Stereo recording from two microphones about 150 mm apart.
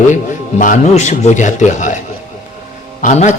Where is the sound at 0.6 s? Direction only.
55° left (ahead or behind).